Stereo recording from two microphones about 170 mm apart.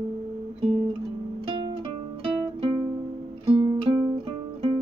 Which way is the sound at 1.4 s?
30° right (ahead or behind).